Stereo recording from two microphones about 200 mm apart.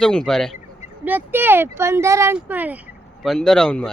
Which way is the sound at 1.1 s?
10° right (ahead or behind).